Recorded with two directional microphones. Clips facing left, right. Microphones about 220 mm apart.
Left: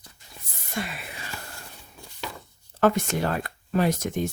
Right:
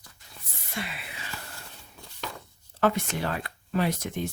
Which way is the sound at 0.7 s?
45° left (ahead or behind).